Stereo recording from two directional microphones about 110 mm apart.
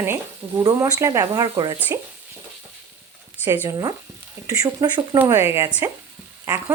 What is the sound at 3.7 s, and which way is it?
Speech, 35° right (ahead or behind).